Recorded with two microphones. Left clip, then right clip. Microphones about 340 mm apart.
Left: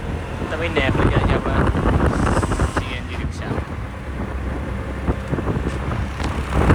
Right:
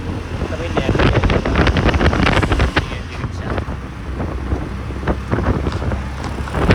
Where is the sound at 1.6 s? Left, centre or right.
Right.